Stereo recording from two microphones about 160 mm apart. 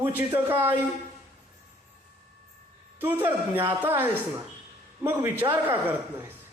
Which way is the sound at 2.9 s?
15° right (ahead or behind).